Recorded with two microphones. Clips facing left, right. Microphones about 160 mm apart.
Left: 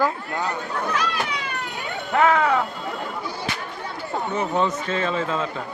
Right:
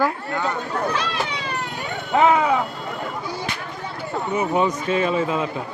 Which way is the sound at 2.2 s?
15° right (ahead or behind).